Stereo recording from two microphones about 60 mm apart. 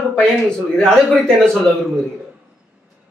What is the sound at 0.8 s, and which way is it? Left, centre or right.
Speech, centre.